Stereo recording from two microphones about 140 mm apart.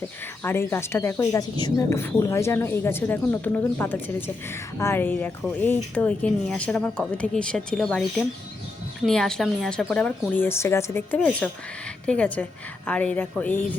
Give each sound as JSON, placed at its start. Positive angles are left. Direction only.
{"t": 0.4, "sound": "speech", "side_deg": 15}
{"t": 9.0, "sound": "a woman's voice", "side_deg": 5}